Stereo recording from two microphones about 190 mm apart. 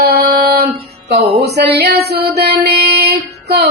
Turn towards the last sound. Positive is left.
turn(degrees=-60)  # may be behind; listen again after turning